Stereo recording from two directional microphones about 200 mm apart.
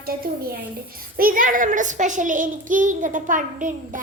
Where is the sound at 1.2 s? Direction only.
45° right (ahead or behind).